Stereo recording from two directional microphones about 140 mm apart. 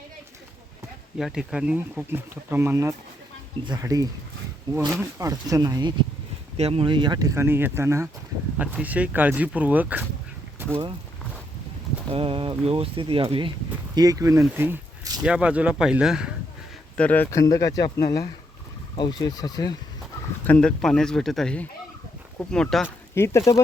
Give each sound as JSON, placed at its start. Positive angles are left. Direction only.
{"t": 1.2, "sound": "speech", "side_deg": -5}
{"t": 6.6, "sound": "speech", "side_deg": -45}
{"t": 8.5, "sound": "speech", "side_deg": -10}
{"t": 10.6, "sound": "a sound", "side_deg": -15}
{"t": 12.1, "sound": "speech", "side_deg": -40}
{"t": 13.9, "sound": "speech", "side_deg": -25}
{"t": 17.0, "sound": "speech", "side_deg": 10}
{"t": 17.3, "sound": "speech", "side_deg": 25}
{"t": 20.5, "sound": "speech", "side_deg": 5}
{"t": 23.1, "sound": "speech", "side_deg": 20}